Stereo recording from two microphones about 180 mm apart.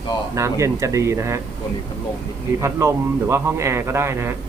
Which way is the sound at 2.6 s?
15° right (ahead or behind).